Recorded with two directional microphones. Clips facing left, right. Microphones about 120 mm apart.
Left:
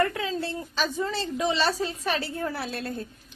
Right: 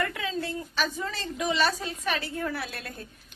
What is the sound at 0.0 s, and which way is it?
A woman's voice, 35° left (ahead or behind).